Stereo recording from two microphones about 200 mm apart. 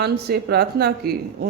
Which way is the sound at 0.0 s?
55° right (ahead or behind).